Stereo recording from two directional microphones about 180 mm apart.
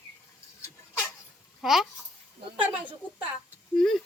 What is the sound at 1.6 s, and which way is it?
A child's voice, centre (ahead or behind).